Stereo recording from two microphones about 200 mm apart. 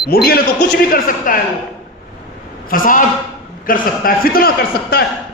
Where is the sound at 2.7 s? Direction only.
45° left (ahead or behind).